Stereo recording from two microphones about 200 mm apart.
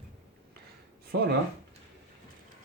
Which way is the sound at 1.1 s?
55° right (ahead or behind).